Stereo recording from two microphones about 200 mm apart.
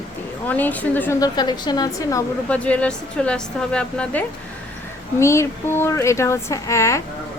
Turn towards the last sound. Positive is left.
turn(degrees=15)  # may be behind; listen again after turning